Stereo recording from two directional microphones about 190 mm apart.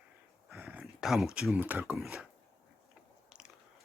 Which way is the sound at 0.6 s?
10° right (ahead or behind).